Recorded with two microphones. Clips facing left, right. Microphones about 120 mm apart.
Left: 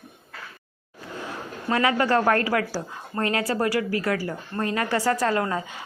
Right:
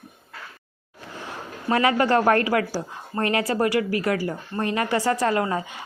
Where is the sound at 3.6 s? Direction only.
35° left (ahead or behind).